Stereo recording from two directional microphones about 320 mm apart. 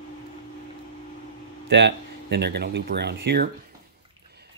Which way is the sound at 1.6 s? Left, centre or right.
Right.